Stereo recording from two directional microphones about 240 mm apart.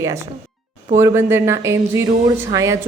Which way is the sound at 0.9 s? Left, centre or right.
Centre.